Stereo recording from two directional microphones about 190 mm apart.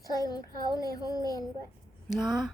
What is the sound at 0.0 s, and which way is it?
A child's voice, 20° left (ahead or behind).